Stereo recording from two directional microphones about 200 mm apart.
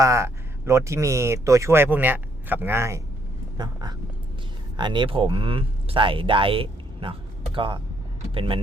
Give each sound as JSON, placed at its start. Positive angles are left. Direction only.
{"t": 0.0, "sound": "speech", "side_deg": -15}